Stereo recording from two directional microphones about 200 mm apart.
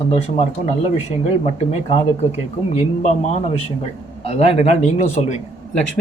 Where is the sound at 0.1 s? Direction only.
30° left (ahead or behind).